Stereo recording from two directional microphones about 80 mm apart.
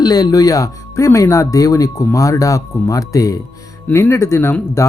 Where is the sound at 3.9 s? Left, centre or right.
Left.